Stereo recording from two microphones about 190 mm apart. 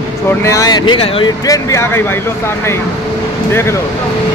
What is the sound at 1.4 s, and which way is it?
Speech, 15° left (ahead or behind).